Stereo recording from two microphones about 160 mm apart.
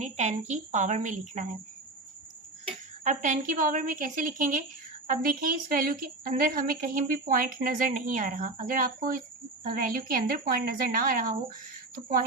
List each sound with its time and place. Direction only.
0.0 s a woman's voice: 45° right (ahead or behind)
3.0 s a woman's voice: 50° right (ahead or behind)